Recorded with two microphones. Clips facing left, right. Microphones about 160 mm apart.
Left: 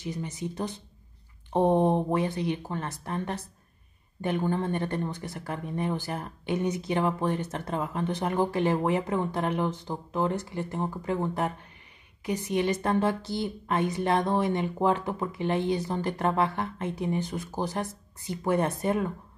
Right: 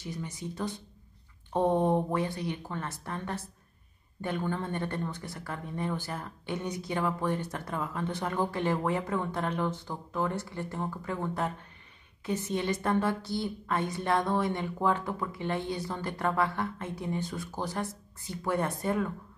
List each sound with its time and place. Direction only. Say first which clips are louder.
0.0 s a woman's voice: left 4 dB; 20° left (ahead or behind)